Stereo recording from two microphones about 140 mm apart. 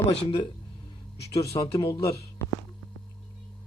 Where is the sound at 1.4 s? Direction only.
45° left (ahead or behind).